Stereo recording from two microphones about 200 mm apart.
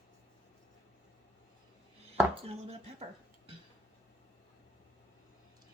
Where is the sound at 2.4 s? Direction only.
35° right (ahead or behind).